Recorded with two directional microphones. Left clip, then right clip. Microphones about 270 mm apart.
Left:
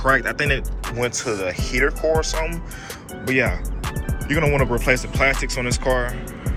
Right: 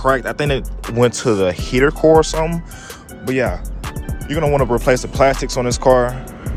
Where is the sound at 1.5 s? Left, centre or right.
Right.